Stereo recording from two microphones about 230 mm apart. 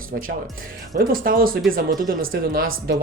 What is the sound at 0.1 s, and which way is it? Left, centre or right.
Speech, right.